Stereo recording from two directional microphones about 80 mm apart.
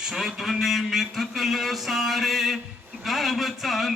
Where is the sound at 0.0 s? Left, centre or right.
Centre.